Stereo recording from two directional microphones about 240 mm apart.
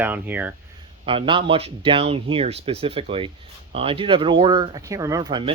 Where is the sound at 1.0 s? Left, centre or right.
Right.